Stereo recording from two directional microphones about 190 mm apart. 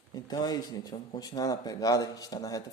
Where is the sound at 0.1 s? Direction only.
20° left (ahead or behind).